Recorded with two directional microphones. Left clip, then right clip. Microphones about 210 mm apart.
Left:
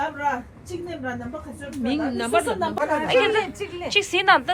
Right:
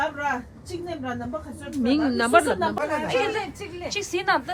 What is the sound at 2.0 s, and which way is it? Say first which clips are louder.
Speech: right 3 dB; 35° right (ahead or behind).